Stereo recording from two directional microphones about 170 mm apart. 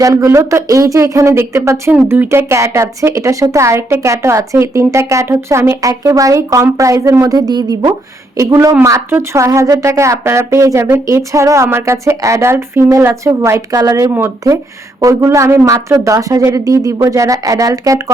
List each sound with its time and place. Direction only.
0.0 s speech: 20° right (ahead or behind)